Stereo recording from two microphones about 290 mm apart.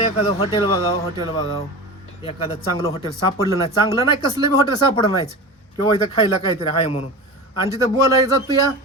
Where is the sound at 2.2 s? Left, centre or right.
Centre.